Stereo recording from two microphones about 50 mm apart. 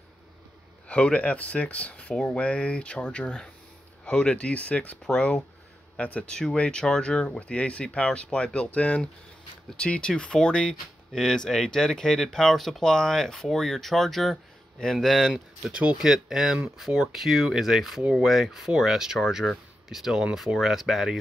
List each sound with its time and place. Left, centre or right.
0.8 s speech: left
6.3 s speech: centre
15.7 s speech: right
16.0 s speech: centre